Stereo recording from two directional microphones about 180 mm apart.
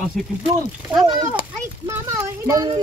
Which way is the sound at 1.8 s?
15° right (ahead or behind).